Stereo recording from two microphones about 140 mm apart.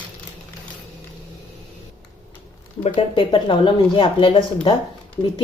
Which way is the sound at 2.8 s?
40° left (ahead or behind).